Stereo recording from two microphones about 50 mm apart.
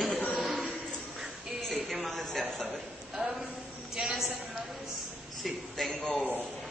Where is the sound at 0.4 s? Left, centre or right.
Centre.